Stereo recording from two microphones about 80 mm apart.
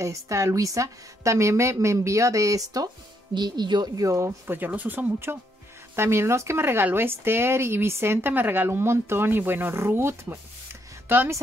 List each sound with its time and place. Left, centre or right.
0.0 s speech: right
3.3 s speech: right
3.9 s speech: right
4.6 s speech: right
5.9 s speech: right